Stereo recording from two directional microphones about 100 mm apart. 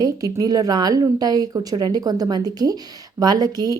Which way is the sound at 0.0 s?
40° right (ahead or behind).